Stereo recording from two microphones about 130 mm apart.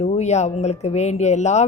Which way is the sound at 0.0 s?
60° left (ahead or behind).